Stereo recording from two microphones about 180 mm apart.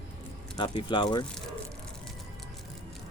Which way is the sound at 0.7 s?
30° left (ahead or behind).